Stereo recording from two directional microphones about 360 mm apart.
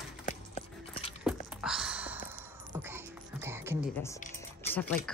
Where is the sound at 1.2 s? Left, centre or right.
Centre.